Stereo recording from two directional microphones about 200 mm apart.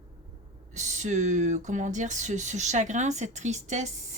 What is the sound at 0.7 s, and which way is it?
Speech, 35° right (ahead or behind).